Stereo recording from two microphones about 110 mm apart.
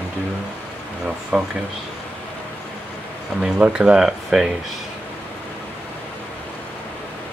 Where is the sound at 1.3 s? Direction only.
5° right (ahead or behind).